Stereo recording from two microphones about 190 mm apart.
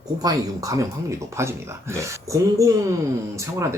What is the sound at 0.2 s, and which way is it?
Speech, 20° right (ahead or behind).